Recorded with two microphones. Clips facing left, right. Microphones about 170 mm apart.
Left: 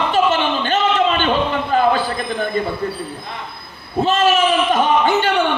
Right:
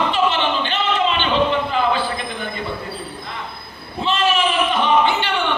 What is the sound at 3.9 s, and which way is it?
A man's voice, 45° left (ahead or behind).